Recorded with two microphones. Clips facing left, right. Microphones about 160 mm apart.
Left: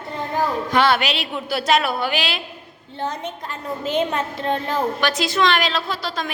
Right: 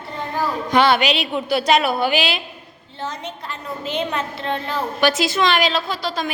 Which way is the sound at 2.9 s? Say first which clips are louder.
Left 2 dB; 55° left (ahead or behind).